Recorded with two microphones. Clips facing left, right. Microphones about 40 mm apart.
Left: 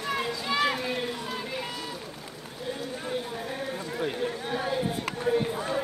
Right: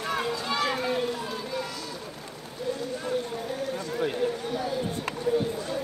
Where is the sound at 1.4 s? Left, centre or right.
Left.